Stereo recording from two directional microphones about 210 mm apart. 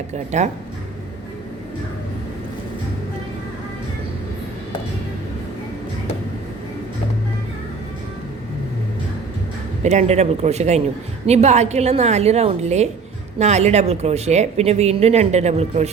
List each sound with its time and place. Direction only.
0.1 s speech: 35° right (ahead or behind)
9.8 s speech: 35° right (ahead or behind)